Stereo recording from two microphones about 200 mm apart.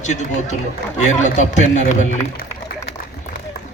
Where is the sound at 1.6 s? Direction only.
35° left (ahead or behind).